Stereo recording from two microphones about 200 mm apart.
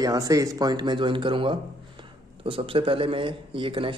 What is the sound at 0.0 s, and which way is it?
Speech, 15° right (ahead or behind).